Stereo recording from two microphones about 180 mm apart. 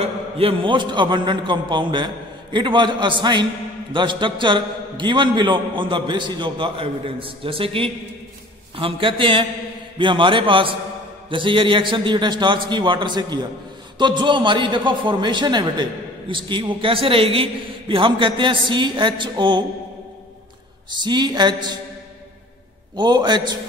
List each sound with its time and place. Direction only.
0.0 s a man's voice: 30° right (ahead or behind)
20.9 s a man's voice: 25° right (ahead or behind)
22.9 s a man's voice: 25° right (ahead or behind)